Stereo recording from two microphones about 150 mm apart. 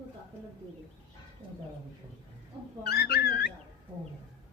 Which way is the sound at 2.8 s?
90° left.